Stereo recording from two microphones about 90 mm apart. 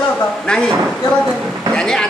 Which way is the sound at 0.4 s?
10° left (ahead or behind).